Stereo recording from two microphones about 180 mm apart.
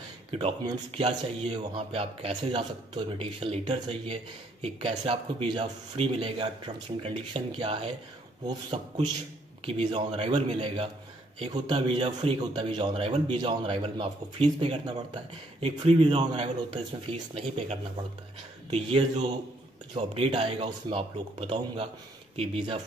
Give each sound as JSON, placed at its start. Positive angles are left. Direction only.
{"t": 0.9, "sound": "a man's voice", "side_deg": -30}
{"t": 9.8, "sound": "a man's voice", "side_deg": -35}